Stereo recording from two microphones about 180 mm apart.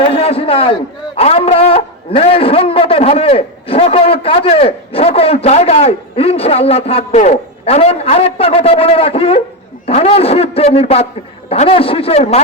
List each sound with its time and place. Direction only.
0.1 s a man's voice: 30° left (ahead or behind)